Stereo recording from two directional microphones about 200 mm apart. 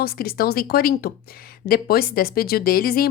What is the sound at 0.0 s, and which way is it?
A woman's voice, 50° left (ahead or behind).